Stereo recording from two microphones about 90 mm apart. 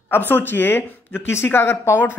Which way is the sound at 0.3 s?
20° left (ahead or behind).